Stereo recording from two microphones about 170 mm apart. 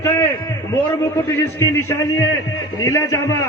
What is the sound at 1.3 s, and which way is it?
A man's voice, 15° left (ahead or behind).